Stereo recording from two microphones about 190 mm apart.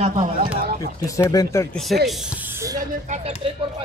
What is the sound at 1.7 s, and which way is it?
A man's voice, centre (ahead or behind).